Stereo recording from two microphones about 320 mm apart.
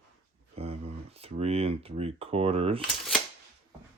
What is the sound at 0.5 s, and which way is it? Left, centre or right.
Speech, centre.